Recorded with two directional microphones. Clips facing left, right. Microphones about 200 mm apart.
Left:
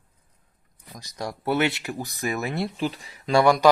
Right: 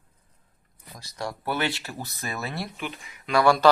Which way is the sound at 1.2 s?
20° left (ahead or behind).